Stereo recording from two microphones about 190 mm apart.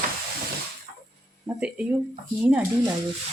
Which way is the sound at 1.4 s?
5° right (ahead or behind).